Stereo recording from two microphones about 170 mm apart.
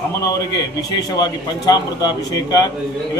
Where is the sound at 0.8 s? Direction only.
20° left (ahead or behind).